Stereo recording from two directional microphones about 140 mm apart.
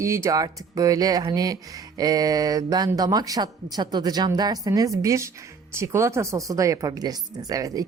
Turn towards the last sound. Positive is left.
turn(degrees=-25)  # may be behind; listen again after turning